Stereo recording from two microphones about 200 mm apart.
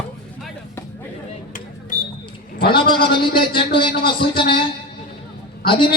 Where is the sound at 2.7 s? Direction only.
25° left (ahead or behind).